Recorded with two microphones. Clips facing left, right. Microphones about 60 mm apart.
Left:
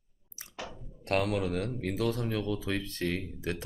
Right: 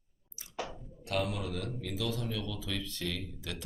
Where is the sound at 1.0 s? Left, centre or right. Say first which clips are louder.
Left 5 dB; left.